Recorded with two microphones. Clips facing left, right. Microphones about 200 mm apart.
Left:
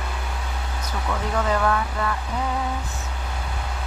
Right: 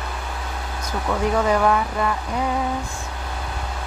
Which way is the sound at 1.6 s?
15° right (ahead or behind).